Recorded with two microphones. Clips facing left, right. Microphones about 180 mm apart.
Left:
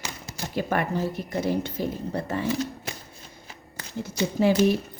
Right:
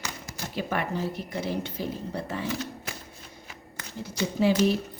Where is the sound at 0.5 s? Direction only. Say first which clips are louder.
Left 4 dB; 50° left (ahead or behind).